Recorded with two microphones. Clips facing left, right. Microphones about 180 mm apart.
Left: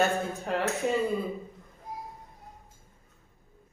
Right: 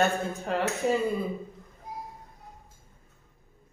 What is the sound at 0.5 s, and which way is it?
Speech, centre (ahead or behind).